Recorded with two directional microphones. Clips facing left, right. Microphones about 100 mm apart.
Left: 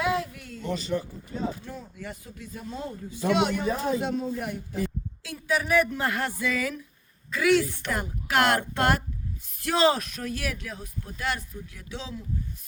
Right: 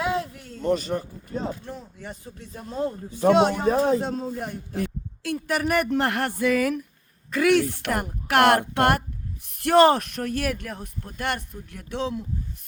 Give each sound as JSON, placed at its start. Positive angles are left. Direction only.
{"t": 0.0, "sound": "a sound", "side_deg": -30}
{"t": 0.6, "sound": "a man's voice", "side_deg": -50}
{"t": 2.0, "sound": "speech", "side_deg": -30}
{"t": 4.7, "sound": "speech", "side_deg": -60}